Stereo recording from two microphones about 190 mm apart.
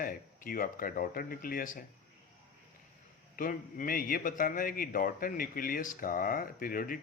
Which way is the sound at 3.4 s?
45° left (ahead or behind).